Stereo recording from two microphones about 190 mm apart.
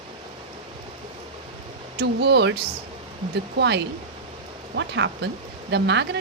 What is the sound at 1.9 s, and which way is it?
Speech, 60° right (ahead or behind).